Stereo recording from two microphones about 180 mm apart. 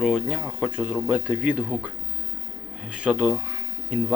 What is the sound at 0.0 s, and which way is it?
Speech, 5° right (ahead or behind).